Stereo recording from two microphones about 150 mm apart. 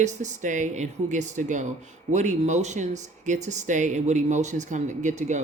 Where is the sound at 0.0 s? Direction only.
55° right (ahead or behind).